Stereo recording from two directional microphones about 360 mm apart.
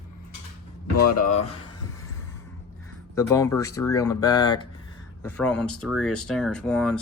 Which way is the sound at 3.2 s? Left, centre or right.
Centre.